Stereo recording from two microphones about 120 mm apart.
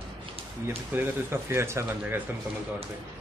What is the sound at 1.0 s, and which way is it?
Speech, 20° right (ahead or behind).